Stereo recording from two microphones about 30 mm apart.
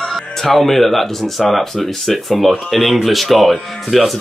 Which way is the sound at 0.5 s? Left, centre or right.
Centre.